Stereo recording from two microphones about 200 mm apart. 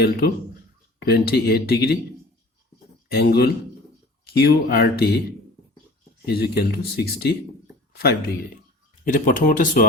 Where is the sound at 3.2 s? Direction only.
50° left (ahead or behind).